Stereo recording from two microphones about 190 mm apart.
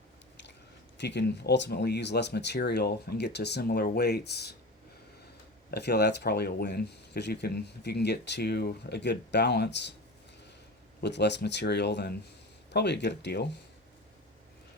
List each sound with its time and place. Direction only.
0.9 s speech: 65° left (ahead or behind)
5.7 s speech: 60° left (ahead or behind)
11.0 s speech: 65° left (ahead or behind)